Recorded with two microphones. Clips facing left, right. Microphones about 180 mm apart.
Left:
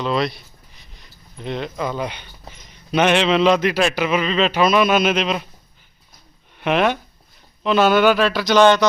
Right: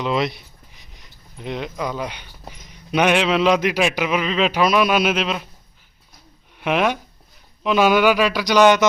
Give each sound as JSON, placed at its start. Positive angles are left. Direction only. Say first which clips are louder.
{"t": 0.0, "sound": "a sound", "louder": "even", "side_deg": -20}
{"t": 1.8, "sound": "a man's voice", "louder": "left 2 dB", "side_deg": -5}
{"t": 6.6, "sound": "a man's voice", "louder": "left 1 dB", "side_deg": -5}